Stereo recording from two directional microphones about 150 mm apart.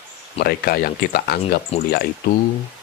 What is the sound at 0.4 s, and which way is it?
Speech, 90° left.